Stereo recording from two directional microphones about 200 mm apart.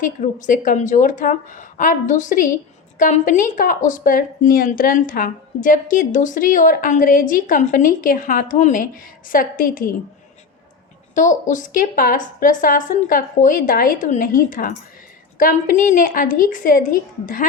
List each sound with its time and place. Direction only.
0.0 s a woman's voice: 40° left (ahead or behind)
11.1 s a woman's voice: 40° left (ahead or behind)